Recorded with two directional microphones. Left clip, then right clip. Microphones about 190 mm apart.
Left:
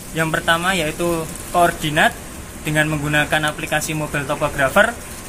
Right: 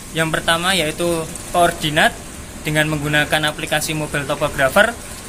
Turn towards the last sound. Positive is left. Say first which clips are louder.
# right 1 dB
turn(degrees=-15)  # may be behind; listen again after turning